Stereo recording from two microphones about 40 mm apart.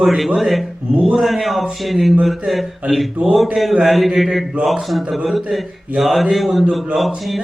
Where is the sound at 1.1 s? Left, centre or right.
Centre.